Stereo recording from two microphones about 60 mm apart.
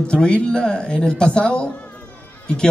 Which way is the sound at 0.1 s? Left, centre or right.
Centre.